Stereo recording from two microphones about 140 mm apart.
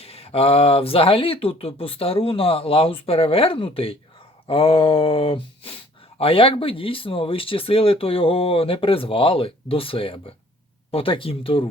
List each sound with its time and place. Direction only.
0.0 s speech: 45° left (ahead or behind)